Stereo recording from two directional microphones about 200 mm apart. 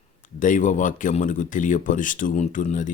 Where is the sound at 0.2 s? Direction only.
40° left (ahead or behind).